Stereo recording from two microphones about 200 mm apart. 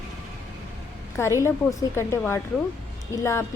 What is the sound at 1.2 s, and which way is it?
A woman's voice, 15° left (ahead or behind).